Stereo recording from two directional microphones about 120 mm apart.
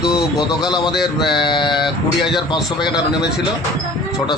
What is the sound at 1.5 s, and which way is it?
Speech, 40° left (ahead or behind).